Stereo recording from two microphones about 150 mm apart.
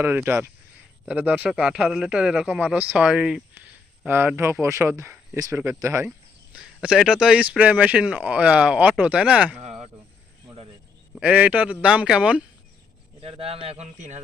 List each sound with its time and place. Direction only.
0.0 s speech: 15° right (ahead or behind)
6.1 s speech: 5° right (ahead or behind)
9.6 s a sound: 45° right (ahead or behind)
11.1 s speech: 10° right (ahead or behind)
13.1 s a man's voice: 40° right (ahead or behind)